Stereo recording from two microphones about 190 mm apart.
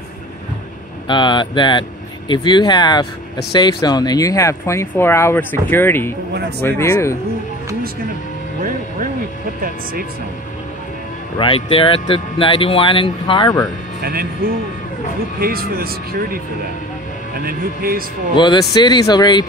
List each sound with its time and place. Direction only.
1.0 s speech: 25° left (ahead or behind)
11.3 s speech: 30° left (ahead or behind)
14.0 s a man's voice: 50° right (ahead or behind)
17.5 s a man's voice: 50° right (ahead or behind)
18.3 s speech: 25° left (ahead or behind)